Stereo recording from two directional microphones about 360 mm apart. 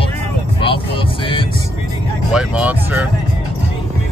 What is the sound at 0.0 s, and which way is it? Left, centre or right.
Music, centre.